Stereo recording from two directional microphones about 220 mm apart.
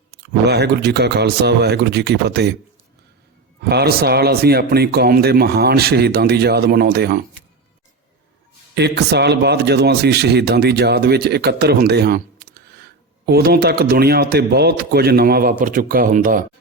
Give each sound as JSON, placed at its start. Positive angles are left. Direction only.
{"t": 0.4, "sound": "speech", "side_deg": -50}
{"t": 3.6, "sound": "speech", "side_deg": -45}
{"t": 8.7, "sound": "speech", "side_deg": -50}
{"t": 13.2, "sound": "speech", "side_deg": -45}